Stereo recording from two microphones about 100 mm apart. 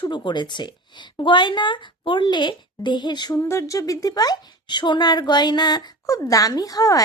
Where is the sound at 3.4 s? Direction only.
30° left (ahead or behind).